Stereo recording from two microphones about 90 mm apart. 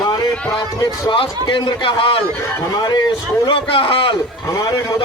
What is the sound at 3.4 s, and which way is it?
Speech, 75° left (ahead or behind).